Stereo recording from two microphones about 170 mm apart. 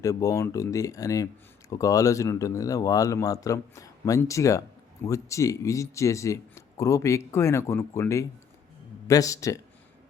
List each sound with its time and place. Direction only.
0.0 s speech: 20° left (ahead or behind)